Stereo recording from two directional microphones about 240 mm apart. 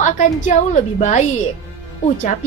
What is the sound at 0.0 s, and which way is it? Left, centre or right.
A woman's voice, left.